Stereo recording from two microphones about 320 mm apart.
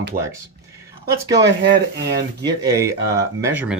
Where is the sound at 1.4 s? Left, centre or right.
Right.